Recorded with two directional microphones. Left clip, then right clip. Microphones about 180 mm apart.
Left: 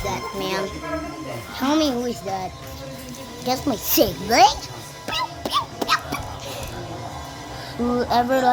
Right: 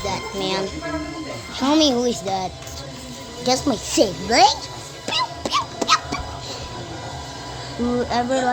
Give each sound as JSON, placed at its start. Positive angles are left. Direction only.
{"t": 0.0, "sound": "music", "side_deg": -15}
{"t": 1.5, "sound": "speech", "side_deg": -20}
{"t": 3.9, "sound": "speech", "side_deg": -5}
{"t": 5.0, "sound": "music", "side_deg": -20}
{"t": 7.9, "sound": "speech", "side_deg": 5}